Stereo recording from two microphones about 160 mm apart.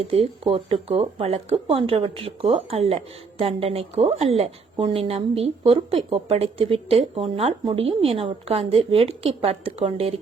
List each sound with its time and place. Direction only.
0.0 s a woman's voice: 35° right (ahead or behind)